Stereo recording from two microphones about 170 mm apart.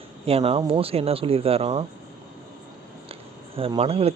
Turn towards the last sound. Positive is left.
turn(degrees=-35)  # may be behind; listen again after turning